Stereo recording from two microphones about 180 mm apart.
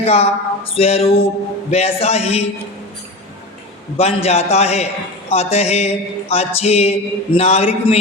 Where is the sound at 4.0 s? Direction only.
35° left (ahead or behind).